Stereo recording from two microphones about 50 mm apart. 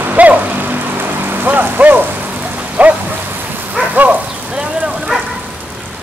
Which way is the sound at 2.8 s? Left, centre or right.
Right.